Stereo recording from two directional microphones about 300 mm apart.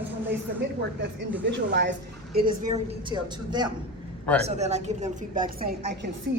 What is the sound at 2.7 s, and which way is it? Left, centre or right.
A woman's voice, centre.